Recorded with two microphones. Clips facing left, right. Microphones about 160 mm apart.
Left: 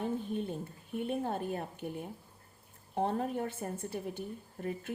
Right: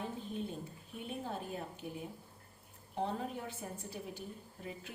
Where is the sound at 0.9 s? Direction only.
55° left (ahead or behind).